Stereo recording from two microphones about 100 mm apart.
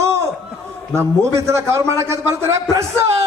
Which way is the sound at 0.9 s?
25° right (ahead or behind).